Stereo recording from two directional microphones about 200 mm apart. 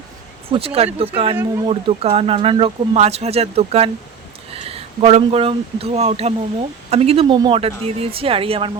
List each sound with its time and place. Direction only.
0.5 s speech: 30° right (ahead or behind)